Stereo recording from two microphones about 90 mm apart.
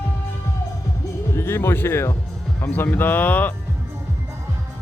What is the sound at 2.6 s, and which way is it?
Speech, 20° left (ahead or behind).